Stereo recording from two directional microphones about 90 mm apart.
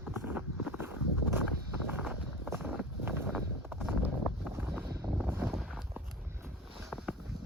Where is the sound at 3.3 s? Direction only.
10° right (ahead or behind).